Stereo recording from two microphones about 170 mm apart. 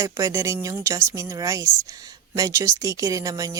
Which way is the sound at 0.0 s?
15° right (ahead or behind).